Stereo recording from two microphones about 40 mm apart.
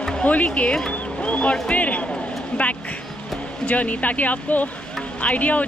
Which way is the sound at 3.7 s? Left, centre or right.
Left.